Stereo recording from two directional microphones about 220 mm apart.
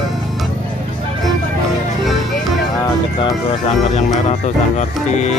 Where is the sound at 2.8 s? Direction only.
20° left (ahead or behind).